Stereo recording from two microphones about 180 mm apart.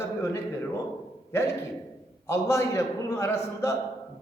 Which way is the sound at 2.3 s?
15° left (ahead or behind).